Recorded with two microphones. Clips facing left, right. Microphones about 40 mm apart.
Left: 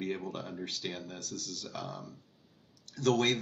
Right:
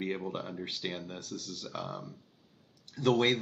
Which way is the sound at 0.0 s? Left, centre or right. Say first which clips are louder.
Right 1 dB; centre.